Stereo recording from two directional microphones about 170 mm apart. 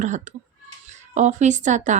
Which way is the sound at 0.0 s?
45° right (ahead or behind).